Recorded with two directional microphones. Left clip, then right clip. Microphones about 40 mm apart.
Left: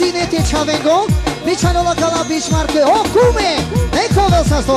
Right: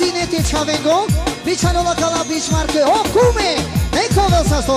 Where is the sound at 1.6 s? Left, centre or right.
Left.